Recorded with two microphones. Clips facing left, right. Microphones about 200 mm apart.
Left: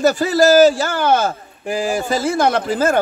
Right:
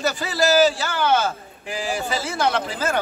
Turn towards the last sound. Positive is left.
turn(degrees=45)  # may be behind; listen again after turning